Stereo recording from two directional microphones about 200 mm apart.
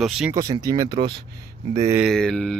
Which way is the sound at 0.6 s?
20° right (ahead or behind).